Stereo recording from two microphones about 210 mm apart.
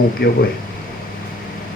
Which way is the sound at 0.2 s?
55° left (ahead or behind).